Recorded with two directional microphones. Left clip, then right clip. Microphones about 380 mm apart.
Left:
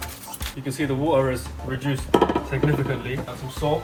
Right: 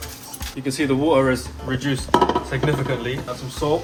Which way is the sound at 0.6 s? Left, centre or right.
Right.